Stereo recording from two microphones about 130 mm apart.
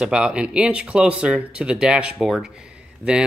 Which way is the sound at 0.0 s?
5° right (ahead or behind).